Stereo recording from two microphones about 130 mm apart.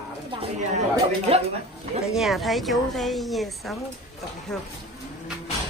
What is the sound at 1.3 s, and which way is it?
Speech, 50° right (ahead or behind).